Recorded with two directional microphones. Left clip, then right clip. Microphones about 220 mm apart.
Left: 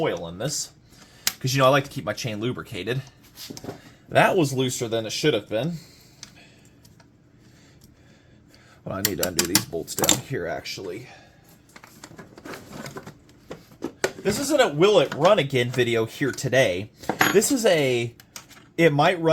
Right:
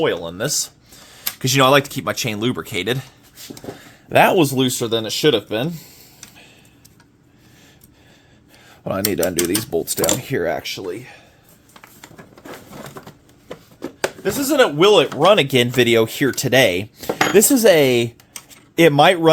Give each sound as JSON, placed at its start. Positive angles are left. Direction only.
{"t": 0.0, "sound": "speech", "side_deg": -55}
{"t": 9.1, "sound": "speech", "side_deg": -40}
{"t": 11.7, "sound": "a sound", "side_deg": -20}
{"t": 14.5, "sound": "speech", "side_deg": -45}